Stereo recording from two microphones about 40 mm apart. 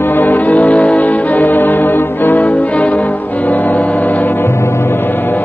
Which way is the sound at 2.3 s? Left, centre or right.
Left.